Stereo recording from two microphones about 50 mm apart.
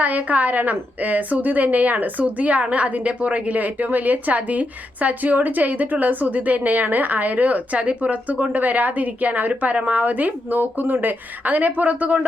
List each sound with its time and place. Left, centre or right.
0.0 s a woman's voice: right